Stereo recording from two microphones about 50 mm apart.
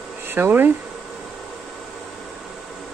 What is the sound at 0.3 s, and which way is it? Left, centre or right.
Speech, right.